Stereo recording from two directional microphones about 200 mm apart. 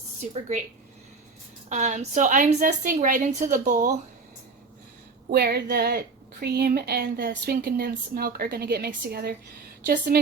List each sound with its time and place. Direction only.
1.7 s a woman's voice: 35° right (ahead or behind)
5.3 s speech: 50° right (ahead or behind)